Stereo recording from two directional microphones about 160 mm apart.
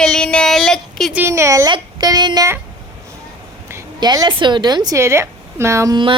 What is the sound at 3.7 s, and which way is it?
A woman's voice, 25° right (ahead or behind).